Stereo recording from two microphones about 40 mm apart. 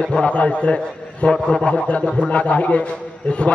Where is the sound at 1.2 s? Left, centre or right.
Centre.